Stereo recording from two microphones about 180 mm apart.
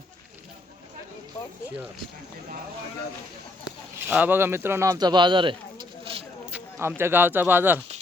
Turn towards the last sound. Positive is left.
turn(degrees=-10)  # may be behind; listen again after turning